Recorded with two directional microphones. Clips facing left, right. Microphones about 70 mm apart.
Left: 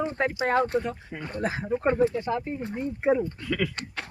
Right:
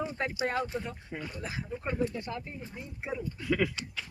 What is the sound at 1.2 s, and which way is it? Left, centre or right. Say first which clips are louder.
Speech: left 13 dB; left.